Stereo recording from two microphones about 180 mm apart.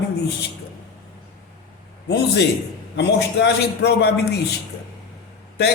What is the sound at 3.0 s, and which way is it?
A man's voice, 70° left (ahead or behind).